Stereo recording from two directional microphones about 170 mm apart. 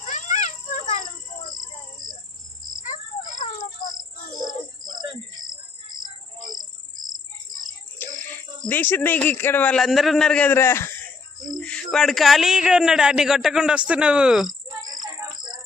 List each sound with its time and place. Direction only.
0.0 s cat: 45° left (ahead or behind)
2.8 s a sound: 45° left (ahead or behind)
4.8 s cricket: 25° right (ahead or behind)
8.0 s speech: 10° left (ahead or behind)
11.4 s a man's voice: 5° left (ahead or behind)
14.8 s music: 25° right (ahead or behind)